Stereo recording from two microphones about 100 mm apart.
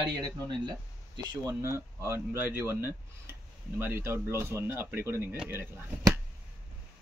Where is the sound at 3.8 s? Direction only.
25° right (ahead or behind).